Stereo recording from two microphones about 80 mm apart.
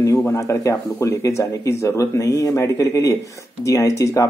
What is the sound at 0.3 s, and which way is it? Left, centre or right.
Speech, left.